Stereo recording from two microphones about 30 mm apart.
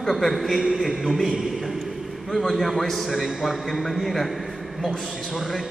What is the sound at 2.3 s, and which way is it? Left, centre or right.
A man's voice, centre.